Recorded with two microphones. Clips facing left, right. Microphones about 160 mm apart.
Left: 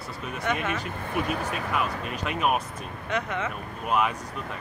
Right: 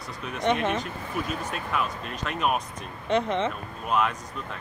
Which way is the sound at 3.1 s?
30° right (ahead or behind).